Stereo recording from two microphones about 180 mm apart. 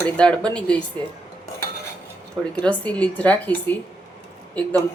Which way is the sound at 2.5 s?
10° left (ahead or behind).